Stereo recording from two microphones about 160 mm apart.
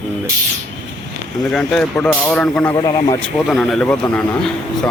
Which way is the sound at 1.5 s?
5° left (ahead or behind).